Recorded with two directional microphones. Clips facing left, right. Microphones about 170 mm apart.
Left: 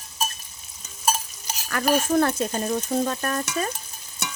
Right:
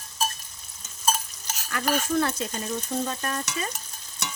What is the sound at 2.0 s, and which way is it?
Speech, 45° left (ahead or behind).